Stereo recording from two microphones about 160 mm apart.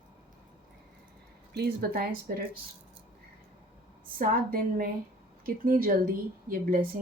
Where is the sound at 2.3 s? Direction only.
60° right (ahead or behind).